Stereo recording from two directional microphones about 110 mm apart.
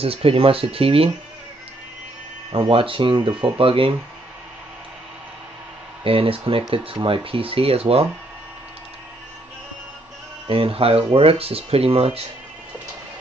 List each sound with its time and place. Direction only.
0.0 s speech: 60° right (ahead or behind)
2.5 s speech: 50° right (ahead or behind)
3.4 s speech: 55° right (ahead or behind)
6.0 s speech: 55° right (ahead or behind)
10.4 s speech: 55° right (ahead or behind)